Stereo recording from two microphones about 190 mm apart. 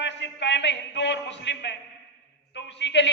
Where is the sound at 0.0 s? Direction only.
65° left (ahead or behind).